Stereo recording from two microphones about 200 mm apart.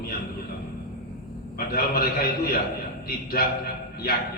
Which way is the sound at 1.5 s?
50° left (ahead or behind).